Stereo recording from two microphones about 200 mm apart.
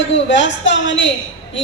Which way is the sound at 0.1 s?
65° left (ahead or behind).